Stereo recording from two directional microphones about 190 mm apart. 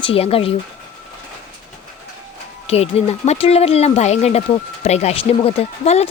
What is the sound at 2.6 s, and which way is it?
Speech, 35° left (ahead or behind).